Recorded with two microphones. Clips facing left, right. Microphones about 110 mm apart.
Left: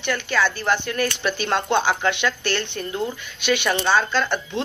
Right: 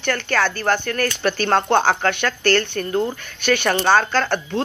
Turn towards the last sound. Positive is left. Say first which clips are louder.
# right 3 dB
turn(degrees=-50)  # may be behind; listen again after turning